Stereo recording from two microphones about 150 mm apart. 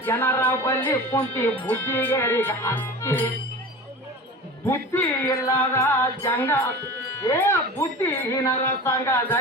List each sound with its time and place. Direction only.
0.0 s speech: 15° left (ahead or behind)
4.6 s speech: 15° left (ahead or behind)